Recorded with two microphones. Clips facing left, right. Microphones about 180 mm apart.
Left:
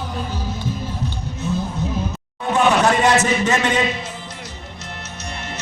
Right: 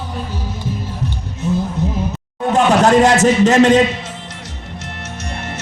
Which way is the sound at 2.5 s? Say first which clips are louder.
Right 5 dB; 45° right (ahead or behind).